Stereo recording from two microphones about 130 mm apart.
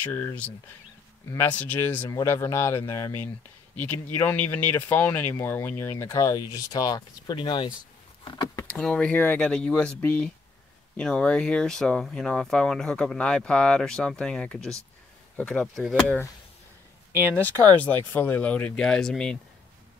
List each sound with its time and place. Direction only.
0.1 s speech: 15° left (ahead or behind); by 7.7 s 35° left (ahead or behind)
8.2 s a sound: 35° left (ahead or behind)
8.6 s speech: 10° left (ahead or behind)
17.4 s speech: 15° left (ahead or behind)